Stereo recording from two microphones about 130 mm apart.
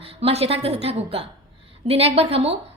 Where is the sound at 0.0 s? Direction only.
50° right (ahead or behind).